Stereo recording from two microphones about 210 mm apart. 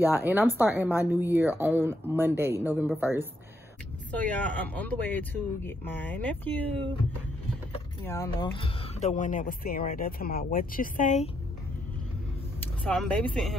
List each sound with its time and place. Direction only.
0.0 s speech: 10° right (ahead or behind)
4.1 s speech: 5° left (ahead or behind)
8.0 s speech: 10° left (ahead or behind)
9.0 s speech: 35° left (ahead or behind)
12.5 s speech: 5° left (ahead or behind)